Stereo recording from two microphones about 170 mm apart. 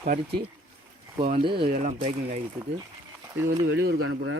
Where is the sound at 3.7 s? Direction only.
80° right.